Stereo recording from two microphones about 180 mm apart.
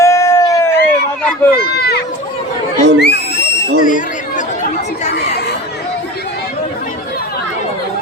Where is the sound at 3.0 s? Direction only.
65° left (ahead or behind).